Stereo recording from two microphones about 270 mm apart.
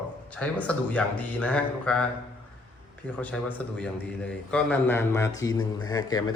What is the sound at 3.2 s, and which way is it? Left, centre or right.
A man's voice, centre.